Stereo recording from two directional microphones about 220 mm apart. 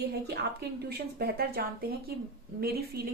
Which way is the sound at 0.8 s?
45° right (ahead or behind).